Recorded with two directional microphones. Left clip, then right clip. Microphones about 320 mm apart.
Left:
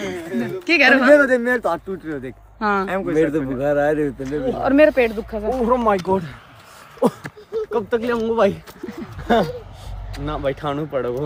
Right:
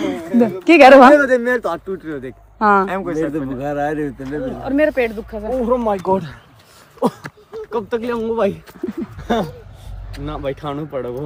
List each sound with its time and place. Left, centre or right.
0.0 s a sound: centre
0.6 s speech: centre
5.6 s speech: left
7.0 s speech: centre